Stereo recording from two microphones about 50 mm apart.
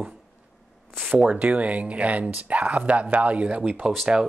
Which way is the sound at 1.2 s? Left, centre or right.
Right.